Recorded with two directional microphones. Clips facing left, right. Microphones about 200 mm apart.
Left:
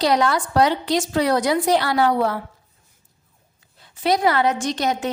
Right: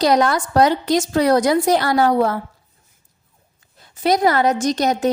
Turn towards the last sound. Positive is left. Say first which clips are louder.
# right 4 dB
turn(degrees=-40)  # may be behind; listen again after turning